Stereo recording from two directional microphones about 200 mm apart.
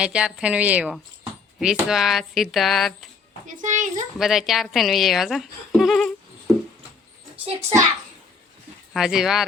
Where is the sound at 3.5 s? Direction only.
40° right (ahead or behind).